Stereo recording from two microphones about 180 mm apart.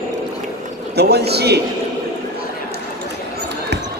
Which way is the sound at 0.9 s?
65° right (ahead or behind).